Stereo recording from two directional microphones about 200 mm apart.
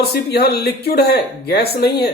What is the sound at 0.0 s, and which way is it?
Speech, 50° left (ahead or behind).